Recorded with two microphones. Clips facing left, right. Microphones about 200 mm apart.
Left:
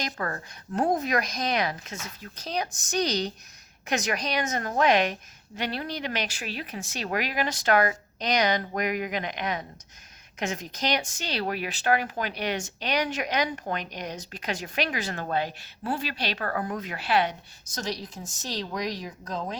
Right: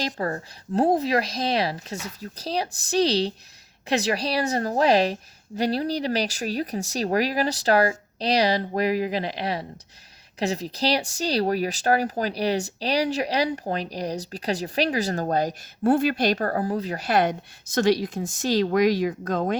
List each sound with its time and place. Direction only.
0.0 s a woman's voice: 25° right (ahead or behind); by 17.3 s 45° right (ahead or behind)
18.2 s speech: 70° right (ahead or behind)